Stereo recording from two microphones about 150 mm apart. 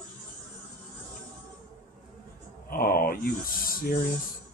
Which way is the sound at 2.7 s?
80° left.